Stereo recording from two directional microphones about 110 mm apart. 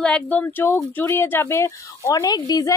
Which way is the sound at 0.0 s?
10° left (ahead or behind).